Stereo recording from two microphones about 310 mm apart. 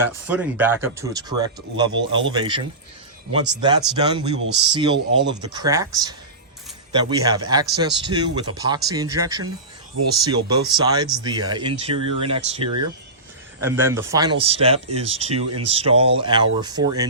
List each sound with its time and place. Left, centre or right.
0.3 s speech: centre
13.6 s speech: centre